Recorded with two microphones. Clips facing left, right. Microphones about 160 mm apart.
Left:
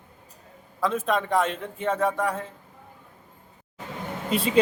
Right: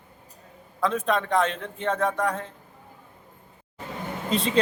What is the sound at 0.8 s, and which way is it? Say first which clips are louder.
A man's voice: even; 5° left (ahead or behind).